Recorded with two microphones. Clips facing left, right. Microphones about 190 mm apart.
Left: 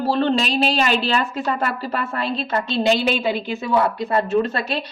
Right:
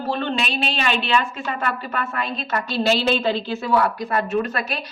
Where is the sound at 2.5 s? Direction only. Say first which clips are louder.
Left 1 dB; 20° left (ahead or behind).